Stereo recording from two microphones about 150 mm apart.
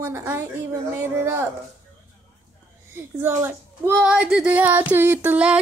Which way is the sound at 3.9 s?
5° right (ahead or behind).